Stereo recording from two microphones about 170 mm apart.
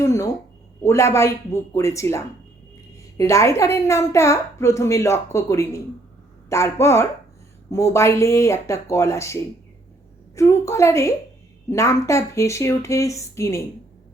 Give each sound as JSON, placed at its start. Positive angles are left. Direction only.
{"t": 0.0, "sound": "a woman's voice", "side_deg": 15}